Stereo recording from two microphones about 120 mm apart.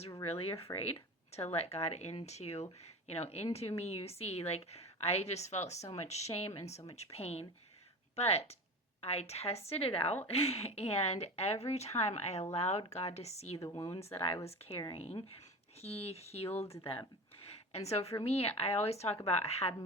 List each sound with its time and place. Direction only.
0.3 s a woman's voice: 55° left (ahead or behind)